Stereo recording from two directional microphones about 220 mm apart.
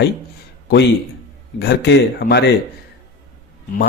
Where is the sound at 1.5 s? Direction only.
50° left (ahead or behind).